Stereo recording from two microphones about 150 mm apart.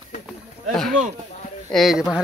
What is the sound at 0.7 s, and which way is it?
Speech, centre (ahead or behind).